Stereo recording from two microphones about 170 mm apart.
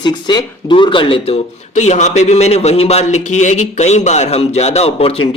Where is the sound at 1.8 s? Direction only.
45° left (ahead or behind).